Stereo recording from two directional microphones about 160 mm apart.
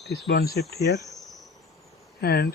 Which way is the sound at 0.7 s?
90° left.